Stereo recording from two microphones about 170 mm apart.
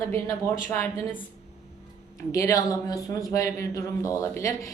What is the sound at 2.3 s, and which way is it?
A man's voice, 20° left (ahead or behind).